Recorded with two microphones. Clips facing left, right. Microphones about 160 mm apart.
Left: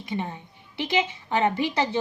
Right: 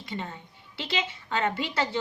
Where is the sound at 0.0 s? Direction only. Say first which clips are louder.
Left 5 dB; 15° left (ahead or behind).